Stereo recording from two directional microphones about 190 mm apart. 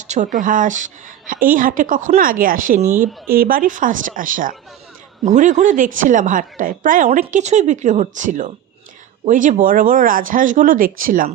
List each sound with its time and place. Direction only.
0.1 s speech: 40° right (ahead or behind)
2.8 s speech: 10° right (ahead or behind)
3.2 s a woman's voice: 50° right (ahead or behind)